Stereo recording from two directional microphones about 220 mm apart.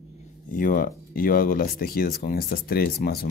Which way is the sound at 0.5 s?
40° left (ahead or behind).